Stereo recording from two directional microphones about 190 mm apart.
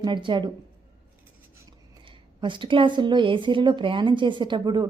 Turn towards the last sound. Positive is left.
turn(degrees=-25)  # may be behind; listen again after turning